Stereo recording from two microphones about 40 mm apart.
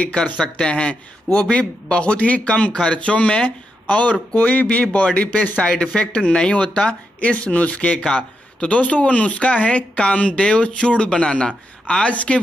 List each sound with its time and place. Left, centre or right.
0.0 s speech: left